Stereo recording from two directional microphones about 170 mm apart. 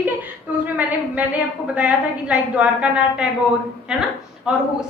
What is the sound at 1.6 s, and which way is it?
A woman's voice, 10° right (ahead or behind).